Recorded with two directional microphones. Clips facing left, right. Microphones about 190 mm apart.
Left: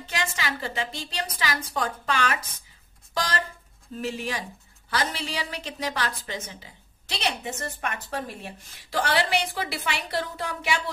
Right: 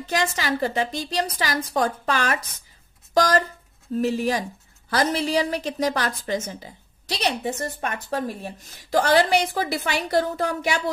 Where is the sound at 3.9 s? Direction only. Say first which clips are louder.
Right 8 dB; 40° right (ahead or behind).